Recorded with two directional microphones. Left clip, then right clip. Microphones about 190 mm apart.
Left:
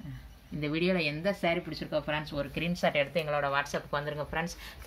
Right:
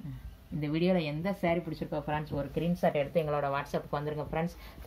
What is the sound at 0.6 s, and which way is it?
Speech, 40° right (ahead or behind).